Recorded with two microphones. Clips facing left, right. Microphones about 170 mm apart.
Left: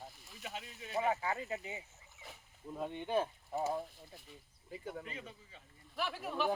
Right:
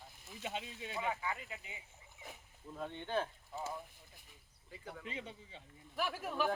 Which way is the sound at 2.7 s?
15° left (ahead or behind).